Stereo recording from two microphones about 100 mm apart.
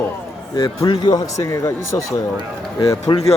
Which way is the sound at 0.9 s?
40° left (ahead or behind).